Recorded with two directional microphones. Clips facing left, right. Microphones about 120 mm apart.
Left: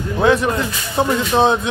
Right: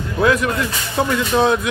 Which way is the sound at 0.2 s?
25° left (ahead or behind).